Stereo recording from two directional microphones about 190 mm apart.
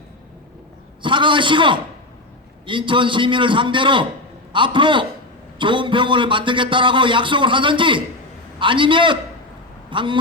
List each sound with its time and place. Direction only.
1.0 s a man's voice: 25° right (ahead or behind)